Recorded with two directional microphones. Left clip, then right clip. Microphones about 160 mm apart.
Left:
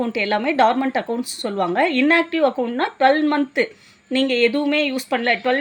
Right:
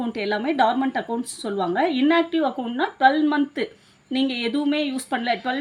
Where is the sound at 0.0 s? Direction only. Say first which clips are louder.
Left 5 dB; 40° left (ahead or behind).